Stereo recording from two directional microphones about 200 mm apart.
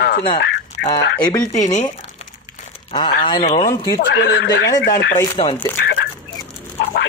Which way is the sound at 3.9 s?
60° left (ahead or behind).